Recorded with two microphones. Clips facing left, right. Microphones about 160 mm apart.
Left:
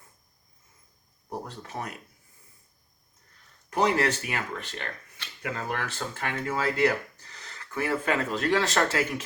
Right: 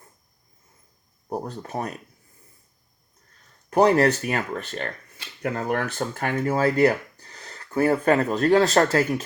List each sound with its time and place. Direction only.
1.3 s speech: 40° right (ahead or behind)
3.8 s speech: 40° right (ahead or behind)
6.0 s speech: 40° right (ahead or behind)